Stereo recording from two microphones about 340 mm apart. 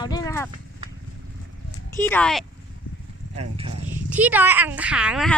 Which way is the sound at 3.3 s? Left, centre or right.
Centre.